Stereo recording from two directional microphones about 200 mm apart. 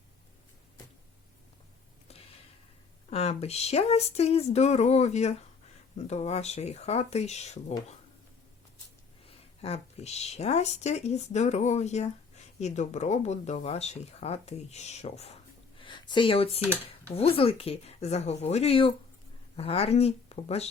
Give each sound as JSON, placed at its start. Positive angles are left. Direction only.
{"t": 2.0, "sound": "a sound", "side_deg": 30}
{"t": 3.1, "sound": "speech", "side_deg": 30}
{"t": 9.2, "sound": "speech", "side_deg": 30}